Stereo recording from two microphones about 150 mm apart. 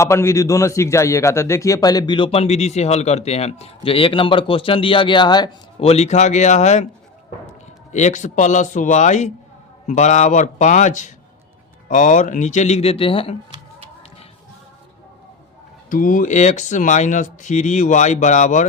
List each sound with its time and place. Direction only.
0.0 s a man's voice: 20° left (ahead or behind)
5.8 s speech: 45° left (ahead or behind)
7.9 s speech: 55° left (ahead or behind); by 13.3 s 35° left (ahead or behind)
15.9 s speech: 65° left (ahead or behind)